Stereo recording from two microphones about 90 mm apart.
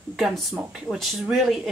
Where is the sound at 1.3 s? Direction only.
Centre (ahead or behind).